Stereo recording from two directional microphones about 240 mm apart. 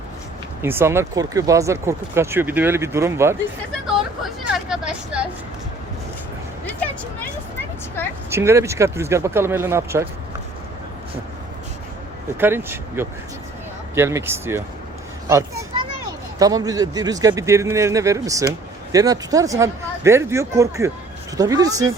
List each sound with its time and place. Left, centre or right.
0.6 s speech: centre
4.4 s vehicle: centre
6.7 s vehicle: centre
8.3 s speech: centre
12.4 s speech: centre
15.3 s children playing: centre
16.4 s speech: centre